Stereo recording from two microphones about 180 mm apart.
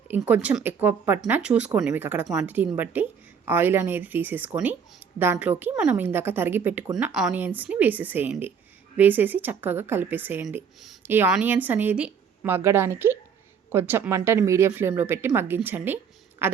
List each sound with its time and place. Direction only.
0.3 s a woman's voice: 5° right (ahead or behind)